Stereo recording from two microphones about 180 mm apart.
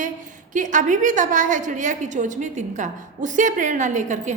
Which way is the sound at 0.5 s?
45° right (ahead or behind).